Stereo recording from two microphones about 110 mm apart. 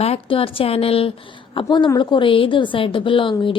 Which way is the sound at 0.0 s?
65° left (ahead or behind).